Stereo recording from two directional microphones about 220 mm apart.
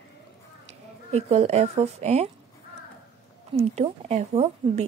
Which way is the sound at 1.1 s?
30° right (ahead or behind).